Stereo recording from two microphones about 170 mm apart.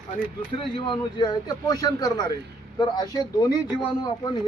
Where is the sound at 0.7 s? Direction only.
30° left (ahead or behind).